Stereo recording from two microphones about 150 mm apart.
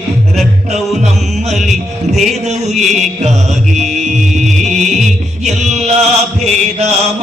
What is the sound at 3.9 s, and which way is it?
Music, 50° right (ahead or behind).